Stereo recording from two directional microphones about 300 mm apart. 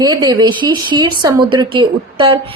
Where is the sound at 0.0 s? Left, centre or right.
Centre.